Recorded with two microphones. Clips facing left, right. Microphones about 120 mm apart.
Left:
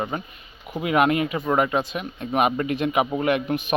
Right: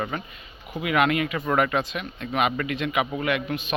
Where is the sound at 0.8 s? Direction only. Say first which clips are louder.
Left 2 dB; 35° left (ahead or behind).